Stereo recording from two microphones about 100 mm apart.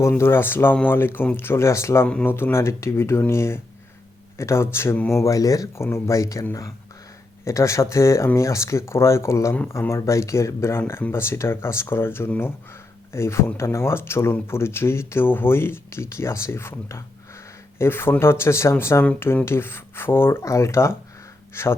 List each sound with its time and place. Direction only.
0.2 s speech: 25° left (ahead or behind)
7.4 s speech: 30° left (ahead or behind)